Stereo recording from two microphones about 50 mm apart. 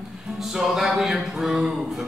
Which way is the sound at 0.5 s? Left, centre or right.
Centre.